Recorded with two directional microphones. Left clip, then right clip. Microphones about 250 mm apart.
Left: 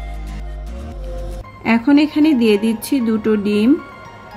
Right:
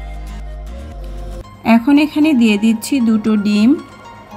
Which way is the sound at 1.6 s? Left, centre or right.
Right.